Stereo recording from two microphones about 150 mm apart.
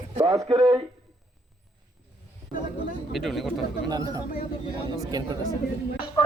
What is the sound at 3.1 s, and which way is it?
Speech, centre (ahead or behind).